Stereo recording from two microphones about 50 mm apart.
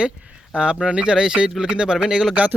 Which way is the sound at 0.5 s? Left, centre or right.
Centre.